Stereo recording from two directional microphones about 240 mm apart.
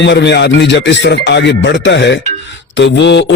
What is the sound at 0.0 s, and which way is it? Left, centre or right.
Speech, left.